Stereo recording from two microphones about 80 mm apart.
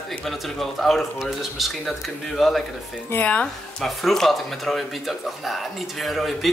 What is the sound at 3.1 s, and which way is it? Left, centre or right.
Speech, centre.